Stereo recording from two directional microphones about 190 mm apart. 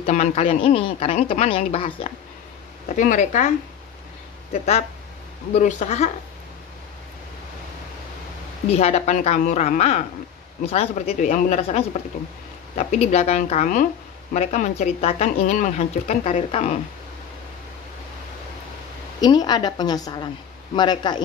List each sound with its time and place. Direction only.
0.0 s speech: 35° left (ahead or behind)
3.0 s speech: 40° left (ahead or behind)
4.5 s speech: 35° left (ahead or behind)
8.6 s speech: 30° left (ahead or behind)
19.2 s a woman's voice: 20° left (ahead or behind)